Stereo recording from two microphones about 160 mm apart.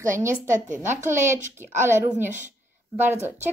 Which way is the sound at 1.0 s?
50° right (ahead or behind).